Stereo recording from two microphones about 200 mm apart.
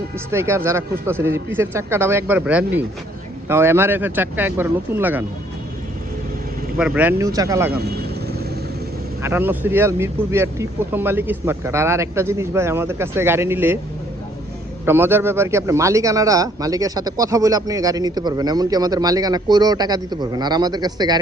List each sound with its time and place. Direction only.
0.3 s a man's voice: 15° right (ahead or behind)
6.7 s a man's voice: 5° right (ahead or behind)
7.7 s vehicle: 50° right (ahead or behind)
9.2 s a man's voice: 10° right (ahead or behind)
14.8 s a man's voice: 10° right (ahead or behind)